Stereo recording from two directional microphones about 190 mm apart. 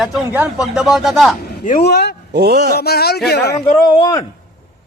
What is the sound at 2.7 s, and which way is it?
Speech, 55° left (ahead or behind).